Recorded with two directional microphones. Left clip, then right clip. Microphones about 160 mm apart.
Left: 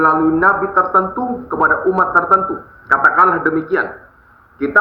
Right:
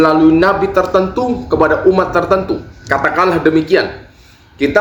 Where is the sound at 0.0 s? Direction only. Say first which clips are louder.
Right 3 dB; 20° right (ahead or behind).